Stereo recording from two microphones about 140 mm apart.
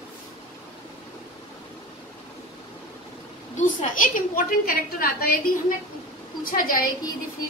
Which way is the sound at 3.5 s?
65° left (ahead or behind).